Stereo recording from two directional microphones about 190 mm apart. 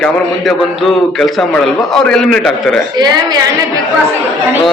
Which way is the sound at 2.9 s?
20° right (ahead or behind).